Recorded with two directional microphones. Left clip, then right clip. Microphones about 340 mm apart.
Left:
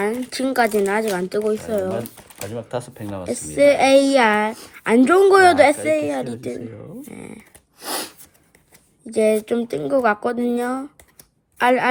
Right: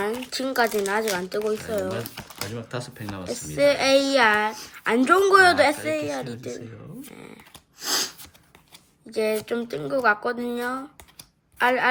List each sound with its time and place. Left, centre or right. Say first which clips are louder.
0.0 s a woman's voice: left 5 dB; centre
7.8 s a sound: right 2 dB; centre
9.1 s a woman's voice: left 7 dB; centre